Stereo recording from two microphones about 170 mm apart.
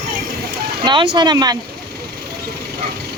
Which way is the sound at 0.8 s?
30° right (ahead or behind).